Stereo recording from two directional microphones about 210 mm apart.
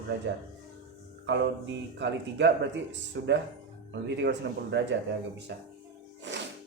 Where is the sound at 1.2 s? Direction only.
60° right (ahead or behind).